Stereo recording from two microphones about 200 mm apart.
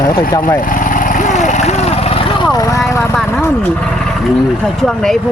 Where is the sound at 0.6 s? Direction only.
40° left (ahead or behind); by 3.2 s 15° left (ahead or behind).